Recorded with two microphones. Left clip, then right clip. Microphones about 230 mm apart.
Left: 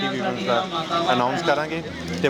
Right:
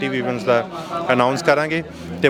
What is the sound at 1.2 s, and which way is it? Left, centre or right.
Speech, right.